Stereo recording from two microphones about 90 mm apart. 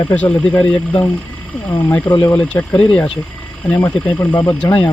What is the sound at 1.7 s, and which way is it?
Speech, 30° left (ahead or behind).